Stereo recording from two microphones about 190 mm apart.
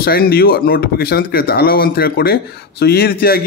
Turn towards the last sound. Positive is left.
turn(degrees=55)  # may be behind; listen again after turning